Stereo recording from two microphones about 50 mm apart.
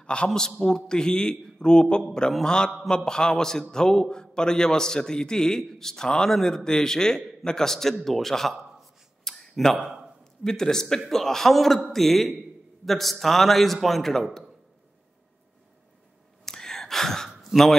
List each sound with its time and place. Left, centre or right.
0.0 s a man's voice: centre
9.2 s a sound: centre
9.8 s a man's voice: centre
10.4 s a man's voice: centre
16.4 s gasp: centre